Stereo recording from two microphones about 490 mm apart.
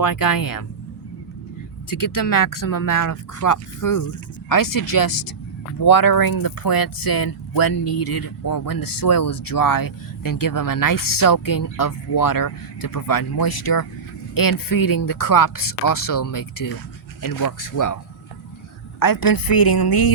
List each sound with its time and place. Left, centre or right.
0.0 s speech: left
1.9 s speech: left
18.9 s speech: left